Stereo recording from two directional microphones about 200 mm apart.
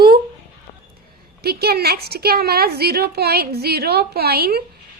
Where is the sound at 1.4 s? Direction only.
50° right (ahead or behind).